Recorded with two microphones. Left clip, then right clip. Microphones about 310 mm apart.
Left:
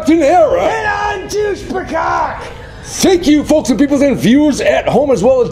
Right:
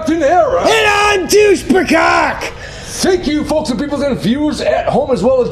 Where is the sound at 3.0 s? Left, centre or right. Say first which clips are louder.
Left 4 dB; left.